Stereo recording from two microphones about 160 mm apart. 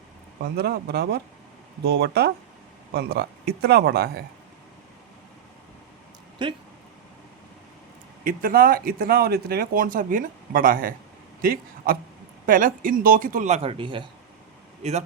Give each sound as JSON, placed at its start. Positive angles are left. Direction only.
{"t": 0.5, "sound": "speech", "side_deg": -85}
{"t": 6.4, "sound": "speech", "side_deg": -30}
{"t": 8.2, "sound": "speech", "side_deg": -60}